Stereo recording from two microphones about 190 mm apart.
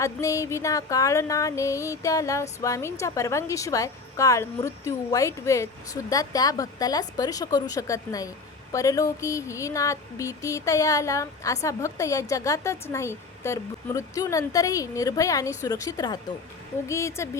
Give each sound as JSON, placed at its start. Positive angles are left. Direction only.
{"t": 0.0, "sound": "music", "side_deg": 15}